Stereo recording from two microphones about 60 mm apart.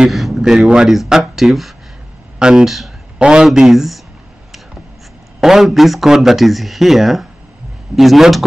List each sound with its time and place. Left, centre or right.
0.0 s a man's voice: centre
3.2 s speech: centre
5.4 s speech: centre